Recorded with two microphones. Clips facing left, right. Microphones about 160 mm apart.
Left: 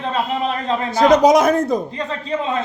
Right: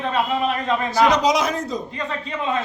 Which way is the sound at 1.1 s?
50° left (ahead or behind).